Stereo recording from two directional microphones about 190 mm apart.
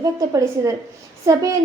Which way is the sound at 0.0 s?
15° right (ahead or behind).